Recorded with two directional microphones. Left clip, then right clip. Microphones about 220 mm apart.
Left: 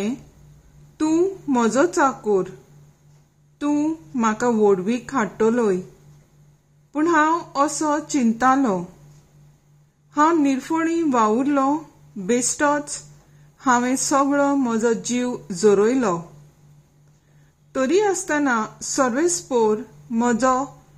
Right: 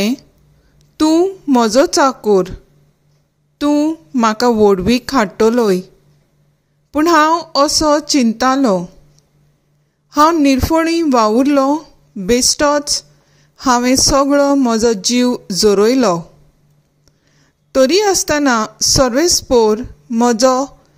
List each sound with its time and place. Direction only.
0.9 s a woman's voice: 25° right (ahead or behind)
3.5 s a woman's voice: 25° right (ahead or behind)
6.9 s a woman's voice: 25° right (ahead or behind)
10.1 s a woman's voice: 25° right (ahead or behind)
17.7 s a woman's voice: 20° right (ahead or behind)